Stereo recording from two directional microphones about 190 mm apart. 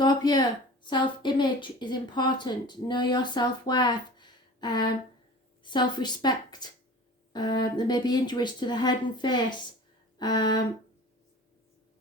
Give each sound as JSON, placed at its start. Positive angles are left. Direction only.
{"t": 0.0, "sound": "a woman's voice", "side_deg": 20}